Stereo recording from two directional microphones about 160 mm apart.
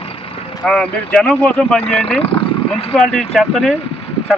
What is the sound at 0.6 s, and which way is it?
Speech, 5° left (ahead or behind).